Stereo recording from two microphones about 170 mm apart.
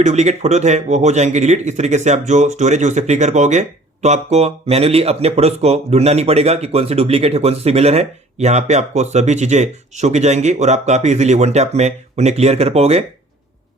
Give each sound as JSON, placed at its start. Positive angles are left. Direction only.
{"t": 0.0, "sound": "speech", "side_deg": -40}